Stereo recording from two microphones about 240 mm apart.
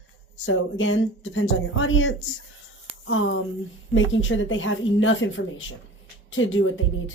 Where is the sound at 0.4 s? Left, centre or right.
Left.